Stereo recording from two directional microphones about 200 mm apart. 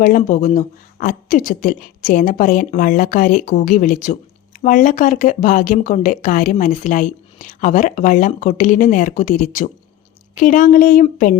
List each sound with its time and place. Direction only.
0.0 s speech: 40° left (ahead or behind)